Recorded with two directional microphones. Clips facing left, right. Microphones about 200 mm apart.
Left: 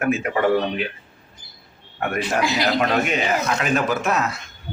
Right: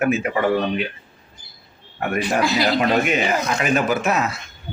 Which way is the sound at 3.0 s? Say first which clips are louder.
Right 1 dB; 5° right (ahead or behind).